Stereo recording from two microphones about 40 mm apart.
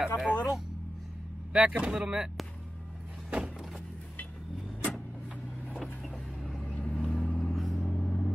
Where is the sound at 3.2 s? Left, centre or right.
Right.